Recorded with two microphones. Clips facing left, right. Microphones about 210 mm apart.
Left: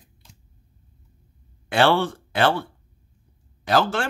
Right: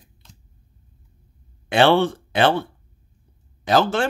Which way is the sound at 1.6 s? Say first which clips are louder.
Right 3 dB; 20° right (ahead or behind).